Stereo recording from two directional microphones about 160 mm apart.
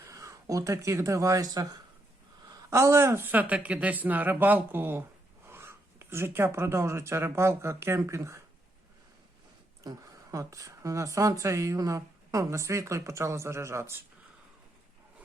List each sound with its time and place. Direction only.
0.1 s speech: 20° right (ahead or behind)
10.3 s a woman's voice: 20° right (ahead or behind)